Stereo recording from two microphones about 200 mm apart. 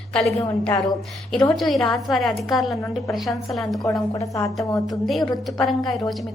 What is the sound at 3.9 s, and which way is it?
Speech, 15° left (ahead or behind).